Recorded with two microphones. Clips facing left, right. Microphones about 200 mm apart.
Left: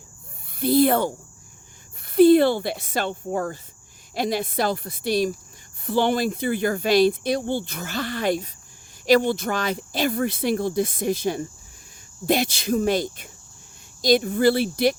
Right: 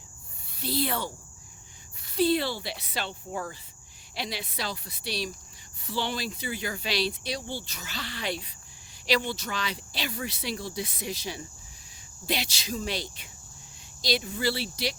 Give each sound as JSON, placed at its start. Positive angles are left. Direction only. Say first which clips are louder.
{"t": 0.5, "sound": "speech", "louder": "left 12 dB", "side_deg": 50}